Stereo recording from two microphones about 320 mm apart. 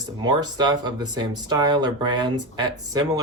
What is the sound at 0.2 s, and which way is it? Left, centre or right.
Speech, centre.